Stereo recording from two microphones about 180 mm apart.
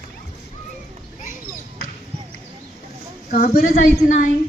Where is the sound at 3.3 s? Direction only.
60° left (ahead or behind).